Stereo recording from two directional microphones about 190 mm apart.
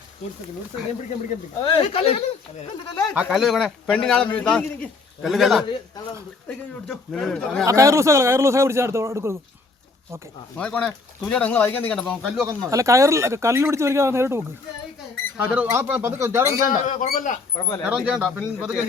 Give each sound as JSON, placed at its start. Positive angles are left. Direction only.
{"t": 1.6, "sound": "speech", "side_deg": 30}
{"t": 3.2, "sound": "speech", "side_deg": 0}
{"t": 7.6, "sound": "speech", "side_deg": -15}
{"t": 10.6, "sound": "speech", "side_deg": 5}
{"t": 12.5, "sound": "speech", "side_deg": -15}
{"t": 16.6, "sound": "speech", "side_deg": 40}
{"t": 17.8, "sound": "speech", "side_deg": -5}